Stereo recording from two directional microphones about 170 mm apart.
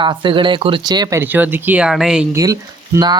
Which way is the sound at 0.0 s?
25° right (ahead or behind).